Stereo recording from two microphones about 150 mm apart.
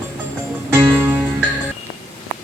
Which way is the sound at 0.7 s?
15° right (ahead or behind).